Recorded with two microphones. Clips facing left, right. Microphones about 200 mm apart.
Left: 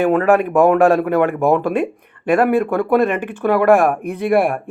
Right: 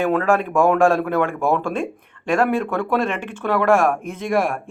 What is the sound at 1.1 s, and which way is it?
Speech, 15° left (ahead or behind).